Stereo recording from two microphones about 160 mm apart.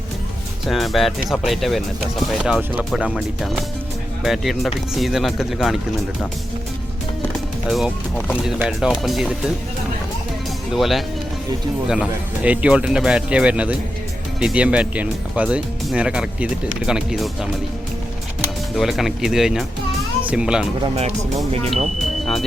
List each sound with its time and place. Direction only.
0.6 s speech: centre (ahead or behind)
7.7 s speech: centre (ahead or behind)
10.8 s speech: centre (ahead or behind)
18.8 s speech: centre (ahead or behind)
20.8 s speech: 40° right (ahead or behind)